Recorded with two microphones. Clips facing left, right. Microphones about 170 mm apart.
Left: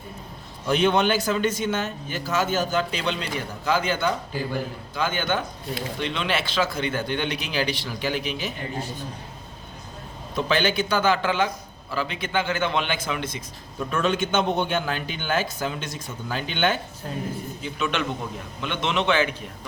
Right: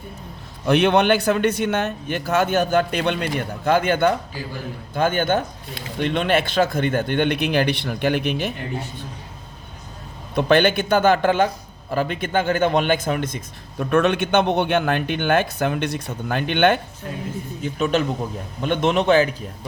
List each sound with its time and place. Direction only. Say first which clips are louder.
0.7 s a man's voice: right 4 dB; 65° right (ahead or behind)
10.3 s a man's voice: right 6 dB; 55° right (ahead or behind)
17.6 s a man's voice: right 7 dB; 40° right (ahead or behind)